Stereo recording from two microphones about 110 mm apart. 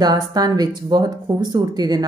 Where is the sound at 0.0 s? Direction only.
35° right (ahead or behind).